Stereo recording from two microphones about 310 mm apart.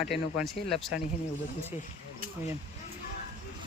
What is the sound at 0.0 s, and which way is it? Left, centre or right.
Speech, centre.